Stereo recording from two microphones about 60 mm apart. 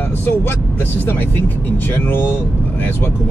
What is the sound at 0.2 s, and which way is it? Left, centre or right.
Speech, left.